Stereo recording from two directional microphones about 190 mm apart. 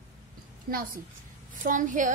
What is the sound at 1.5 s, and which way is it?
Speech, 45° right (ahead or behind).